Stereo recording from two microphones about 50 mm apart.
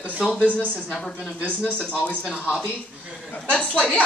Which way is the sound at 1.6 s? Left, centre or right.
Left.